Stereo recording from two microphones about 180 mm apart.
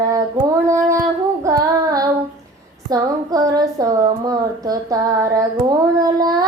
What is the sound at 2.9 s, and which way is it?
A woman's voice, 20° right (ahead or behind).